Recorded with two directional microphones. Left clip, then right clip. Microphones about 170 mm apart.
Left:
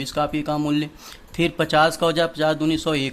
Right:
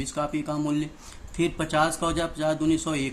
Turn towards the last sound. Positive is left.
turn(degrees=40)  # may be behind; listen again after turning